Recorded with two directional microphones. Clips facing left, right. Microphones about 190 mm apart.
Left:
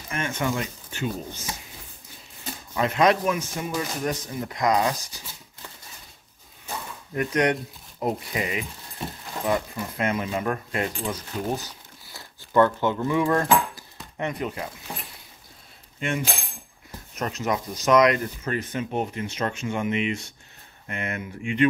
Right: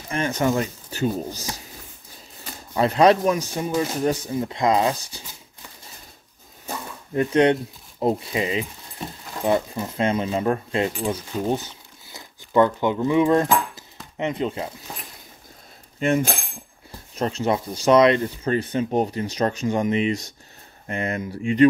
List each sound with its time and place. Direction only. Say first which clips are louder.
0.1 s speech: right 5 dB; 35° right (ahead or behind)
2.7 s speech: right 4 dB; 35° right (ahead or behind)
7.2 s speech: right 5 dB; 30° right (ahead or behind)
11.4 s crumpling: right 6 dB; 25° right (ahead or behind)
16.0 s speech: right 7 dB; 45° right (ahead or behind)
17.1 s speech: right 4 dB; 30° right (ahead or behind)